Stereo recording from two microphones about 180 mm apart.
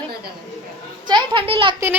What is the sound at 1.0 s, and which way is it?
Speech, 25° right (ahead or behind).